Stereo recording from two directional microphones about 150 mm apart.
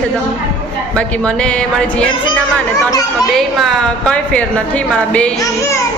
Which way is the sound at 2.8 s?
25° left (ahead or behind).